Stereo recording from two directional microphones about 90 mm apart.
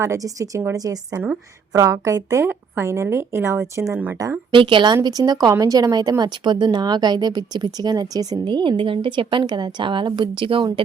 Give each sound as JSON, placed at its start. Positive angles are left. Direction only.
{"t": 0.0, "sound": "a woman's voice", "side_deg": -40}
{"t": 4.5, "sound": "a woman's voice", "side_deg": -70}
{"t": 5.0, "sound": "a woman's voice", "side_deg": -50}
{"t": 8.4, "sound": "speech", "side_deg": -60}